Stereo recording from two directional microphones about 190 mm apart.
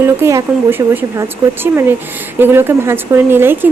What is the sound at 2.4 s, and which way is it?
A woman's voice, 10° right (ahead or behind).